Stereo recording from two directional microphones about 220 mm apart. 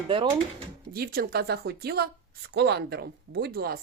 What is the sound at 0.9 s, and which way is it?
A woman's voice, 45° right (ahead or behind).